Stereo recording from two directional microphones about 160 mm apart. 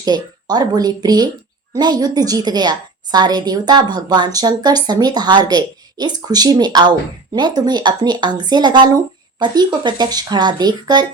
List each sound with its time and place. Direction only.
0.0 s a woman's voice: 25° right (ahead or behind)